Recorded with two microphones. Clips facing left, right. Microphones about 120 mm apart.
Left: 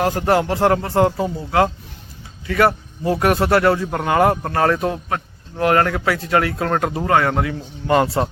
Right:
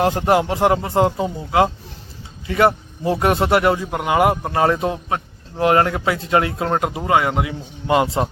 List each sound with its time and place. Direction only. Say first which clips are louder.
0.0 s a man's voice: right 1 dB; 25° right (ahead or behind)